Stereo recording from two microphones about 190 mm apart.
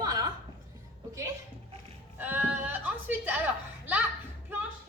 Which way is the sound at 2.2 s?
10° right (ahead or behind).